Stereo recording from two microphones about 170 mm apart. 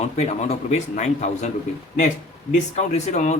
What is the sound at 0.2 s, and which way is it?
Speech, 40° left (ahead or behind).